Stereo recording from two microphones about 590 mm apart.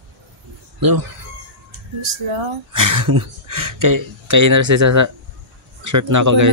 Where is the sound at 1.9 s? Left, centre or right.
Right.